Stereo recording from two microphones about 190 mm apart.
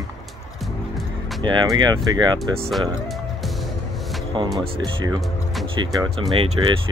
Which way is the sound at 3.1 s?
Centre (ahead or behind).